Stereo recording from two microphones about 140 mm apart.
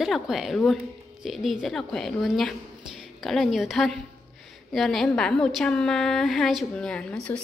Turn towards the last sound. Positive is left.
turn(degrees=5)  # may be behind; listen again after turning